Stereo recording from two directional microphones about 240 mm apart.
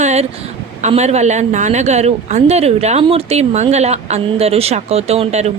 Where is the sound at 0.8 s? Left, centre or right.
Right.